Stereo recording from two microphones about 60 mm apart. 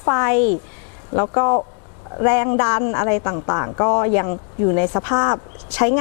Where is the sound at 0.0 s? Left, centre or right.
Left.